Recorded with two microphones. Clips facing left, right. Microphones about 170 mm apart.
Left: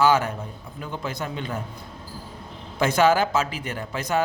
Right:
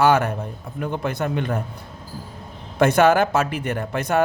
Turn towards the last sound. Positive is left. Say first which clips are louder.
# right 4 dB
turn(degrees=-60)  # may be behind; listen again after turning